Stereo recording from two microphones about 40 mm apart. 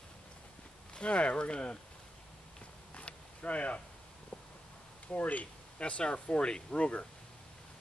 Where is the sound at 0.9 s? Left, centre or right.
Left.